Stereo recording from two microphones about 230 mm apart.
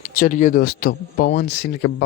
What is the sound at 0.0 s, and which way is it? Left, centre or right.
Speech, left.